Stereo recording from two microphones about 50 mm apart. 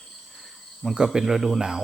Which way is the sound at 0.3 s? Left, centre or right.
Centre.